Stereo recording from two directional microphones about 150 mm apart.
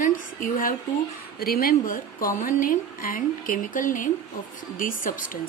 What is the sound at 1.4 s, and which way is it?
A woman's voice, 80° left.